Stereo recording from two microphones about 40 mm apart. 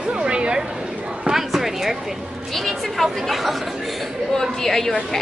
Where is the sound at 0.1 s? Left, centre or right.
Right.